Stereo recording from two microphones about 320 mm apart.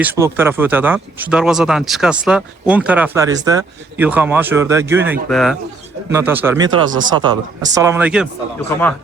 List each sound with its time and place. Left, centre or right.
0.0 s speech: centre
7.8 s speech: centre